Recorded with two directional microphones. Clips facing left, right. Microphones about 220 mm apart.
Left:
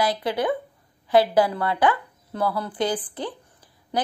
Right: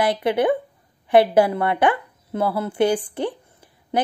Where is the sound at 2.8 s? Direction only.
25° right (ahead or behind).